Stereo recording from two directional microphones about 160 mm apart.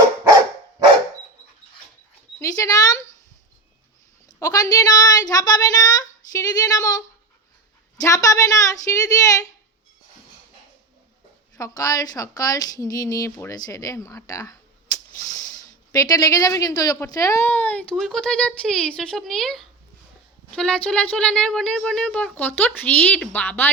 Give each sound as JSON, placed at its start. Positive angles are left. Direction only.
{"t": 2.4, "sound": "speech", "side_deg": 20}
{"t": 4.3, "sound": "a woman's voice", "side_deg": 25}
{"t": 8.0, "sound": "a woman's voice", "side_deg": 20}
{"t": 11.5, "sound": "a woman's voice", "side_deg": 20}